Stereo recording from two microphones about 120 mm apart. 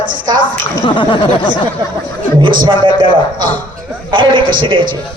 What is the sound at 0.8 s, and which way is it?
Speech, 40° left (ahead or behind).